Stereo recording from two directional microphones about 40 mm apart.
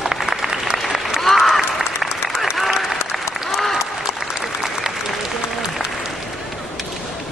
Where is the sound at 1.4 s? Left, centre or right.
Centre.